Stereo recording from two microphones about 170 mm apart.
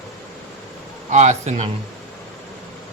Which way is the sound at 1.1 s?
45° right (ahead or behind).